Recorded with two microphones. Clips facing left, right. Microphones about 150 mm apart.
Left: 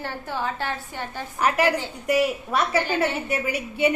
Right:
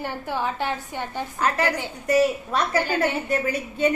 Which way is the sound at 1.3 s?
15° left (ahead or behind).